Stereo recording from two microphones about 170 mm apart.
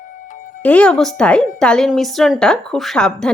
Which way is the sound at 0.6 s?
5° left (ahead or behind).